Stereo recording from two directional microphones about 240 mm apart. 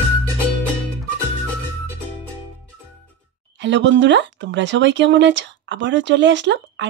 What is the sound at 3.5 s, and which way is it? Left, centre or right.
Speech, right.